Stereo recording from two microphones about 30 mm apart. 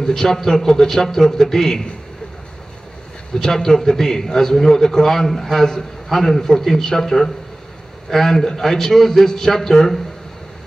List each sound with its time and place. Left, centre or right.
0.0 s a man's voice: centre
3.3 s a man's voice: centre
6.3 s a man's voice: centre